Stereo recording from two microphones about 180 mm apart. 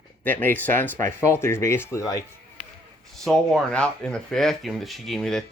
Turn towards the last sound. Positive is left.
turn(degrees=0)  # may be behind; listen again after turning